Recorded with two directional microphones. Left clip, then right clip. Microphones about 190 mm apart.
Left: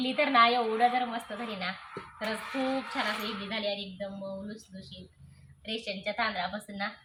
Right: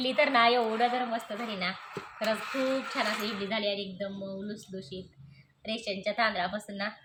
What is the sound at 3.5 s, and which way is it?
A woman's voice, 15° right (ahead or behind).